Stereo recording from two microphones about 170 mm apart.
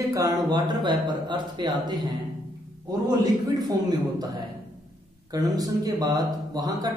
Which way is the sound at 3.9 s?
25° right (ahead or behind).